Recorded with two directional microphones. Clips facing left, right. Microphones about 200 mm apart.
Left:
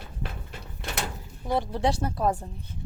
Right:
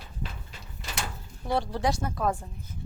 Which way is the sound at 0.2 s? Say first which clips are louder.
Left 2 dB; 60° left (ahead or behind).